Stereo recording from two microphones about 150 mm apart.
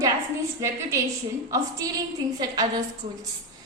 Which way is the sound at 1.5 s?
25° right (ahead or behind).